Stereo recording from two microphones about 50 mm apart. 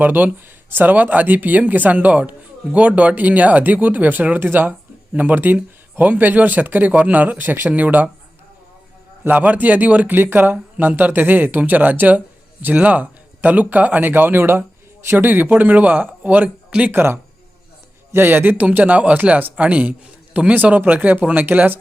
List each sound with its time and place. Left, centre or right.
0.0 s speech: right
9.2 s speech: right
16.9 s speech: right